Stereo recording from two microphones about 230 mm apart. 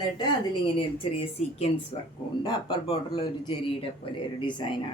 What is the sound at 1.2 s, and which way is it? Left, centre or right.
Speech, left.